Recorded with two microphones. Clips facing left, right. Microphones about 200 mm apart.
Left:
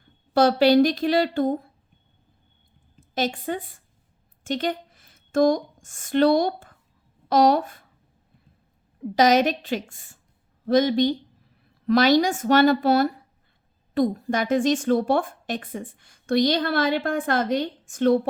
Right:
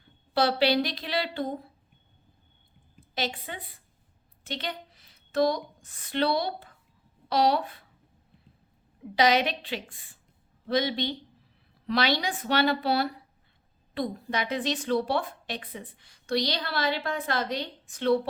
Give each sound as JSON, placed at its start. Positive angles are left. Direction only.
{"t": 0.3, "sound": "speech", "side_deg": 45}
{"t": 3.0, "sound": "a woman's voice", "side_deg": 45}
{"t": 9.1, "sound": "speech", "side_deg": 45}